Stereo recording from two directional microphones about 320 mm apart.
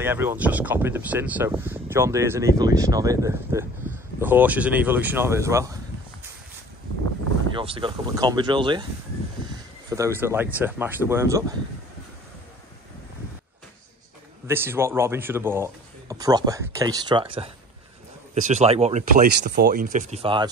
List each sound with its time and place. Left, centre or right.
0.0 s speech: centre
7.5 s speech: centre
9.8 s speech: centre
14.5 s speech: centre